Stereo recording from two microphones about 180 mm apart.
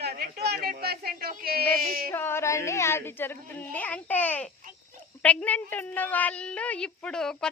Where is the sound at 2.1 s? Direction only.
15° left (ahead or behind).